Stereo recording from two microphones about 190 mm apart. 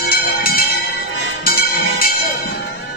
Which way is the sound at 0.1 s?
50° left (ahead or behind).